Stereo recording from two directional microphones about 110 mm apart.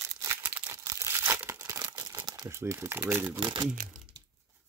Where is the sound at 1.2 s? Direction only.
15° right (ahead or behind).